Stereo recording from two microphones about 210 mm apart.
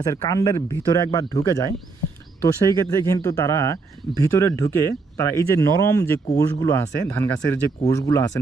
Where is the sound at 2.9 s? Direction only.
15° left (ahead or behind).